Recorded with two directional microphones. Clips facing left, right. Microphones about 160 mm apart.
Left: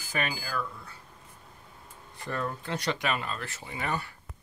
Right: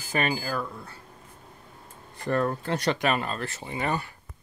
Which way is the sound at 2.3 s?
50° right (ahead or behind).